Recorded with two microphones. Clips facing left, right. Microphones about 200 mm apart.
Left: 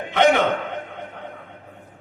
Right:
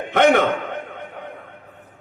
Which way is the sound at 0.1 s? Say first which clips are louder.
Right 2 dB; 50° right (ahead or behind).